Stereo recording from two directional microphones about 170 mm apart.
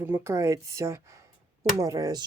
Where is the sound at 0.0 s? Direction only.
15° right (ahead or behind).